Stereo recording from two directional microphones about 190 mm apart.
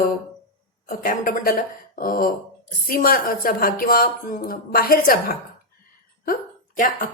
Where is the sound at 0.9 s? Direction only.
45° left (ahead or behind).